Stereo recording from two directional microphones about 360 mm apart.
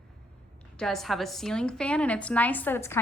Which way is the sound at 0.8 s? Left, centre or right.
Centre.